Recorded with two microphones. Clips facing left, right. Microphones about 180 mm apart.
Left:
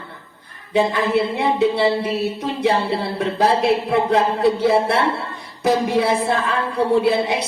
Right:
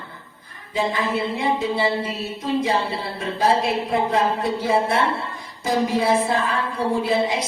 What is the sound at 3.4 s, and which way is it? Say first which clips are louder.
A woman's voice: left 3 dB; 70° left (ahead or behind).